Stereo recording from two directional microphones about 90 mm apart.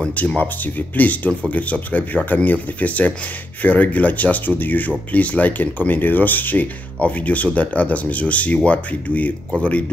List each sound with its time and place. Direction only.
0.0 s speech: 15° left (ahead or behind)